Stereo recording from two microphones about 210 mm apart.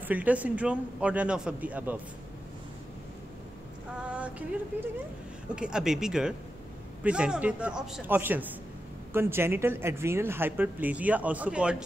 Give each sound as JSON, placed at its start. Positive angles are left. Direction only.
{"t": 0.1, "sound": "speech", "side_deg": -5}
{"t": 4.1, "sound": "female singing", "side_deg": -5}
{"t": 5.5, "sound": "a man's voice", "side_deg": -5}